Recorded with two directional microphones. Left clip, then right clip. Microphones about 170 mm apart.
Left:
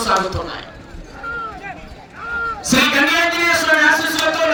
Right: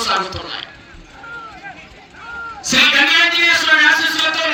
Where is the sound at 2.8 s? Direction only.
40° left (ahead or behind).